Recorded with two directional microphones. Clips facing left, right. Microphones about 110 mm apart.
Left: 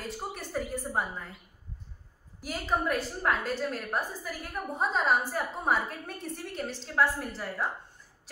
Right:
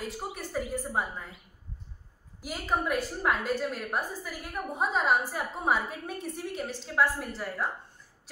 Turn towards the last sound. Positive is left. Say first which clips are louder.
# even
turn(degrees=0)  # may be behind; listen again after turning